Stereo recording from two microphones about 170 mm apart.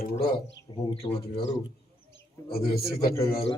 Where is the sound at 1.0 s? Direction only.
35° left (ahead or behind).